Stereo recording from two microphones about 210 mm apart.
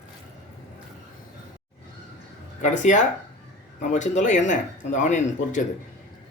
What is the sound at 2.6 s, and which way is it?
Speech, 35° left (ahead or behind).